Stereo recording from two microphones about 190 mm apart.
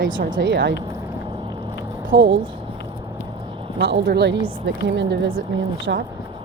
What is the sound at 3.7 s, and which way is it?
A woman's voice, 60° right (ahead or behind).